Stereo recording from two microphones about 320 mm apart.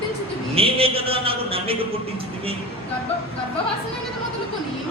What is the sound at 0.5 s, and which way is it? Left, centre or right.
Mantra, centre.